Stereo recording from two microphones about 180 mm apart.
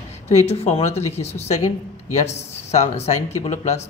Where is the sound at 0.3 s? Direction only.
40° left (ahead or behind).